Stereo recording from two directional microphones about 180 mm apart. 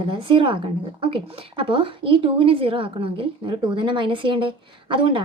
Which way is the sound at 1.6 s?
30° right (ahead or behind).